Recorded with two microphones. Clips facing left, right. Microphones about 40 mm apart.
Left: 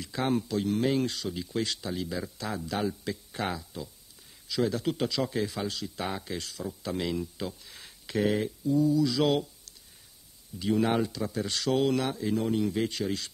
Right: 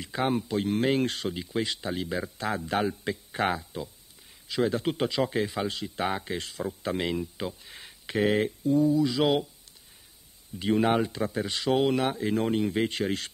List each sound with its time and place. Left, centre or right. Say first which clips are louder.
0.0 s speech: right 1 dB; right
0.6 s speech: right 3 dB; right
1.3 s speech: right 1 dB; right
8.4 s speech: right 3 dB; right; by 9.8 s centre
10.6 s speech: right 2 dB; right